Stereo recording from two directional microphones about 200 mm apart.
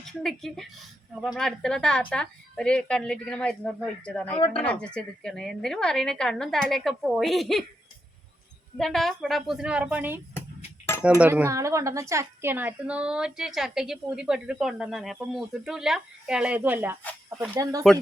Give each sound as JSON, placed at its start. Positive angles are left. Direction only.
{"t": 0.2, "sound": "a woman's voice", "side_deg": 0}
{"t": 8.8, "sound": "a woman's voice", "side_deg": 0}
{"t": 11.2, "sound": "a woman's voice", "side_deg": -10}